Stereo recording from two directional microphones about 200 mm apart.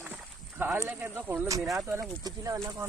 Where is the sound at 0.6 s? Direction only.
10° right (ahead or behind).